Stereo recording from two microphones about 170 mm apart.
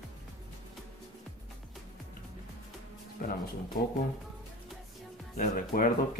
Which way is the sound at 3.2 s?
55° left (ahead or behind).